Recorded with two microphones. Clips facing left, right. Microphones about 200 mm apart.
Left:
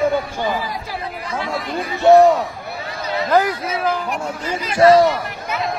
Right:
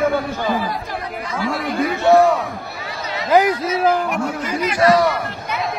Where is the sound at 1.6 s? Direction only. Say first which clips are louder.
Right 5 dB; 60° right (ahead or behind).